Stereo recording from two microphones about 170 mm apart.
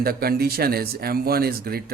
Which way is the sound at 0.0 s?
65° right (ahead or behind).